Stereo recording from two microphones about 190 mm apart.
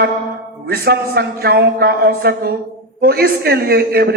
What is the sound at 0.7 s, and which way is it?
A man's voice, 55° right (ahead or behind).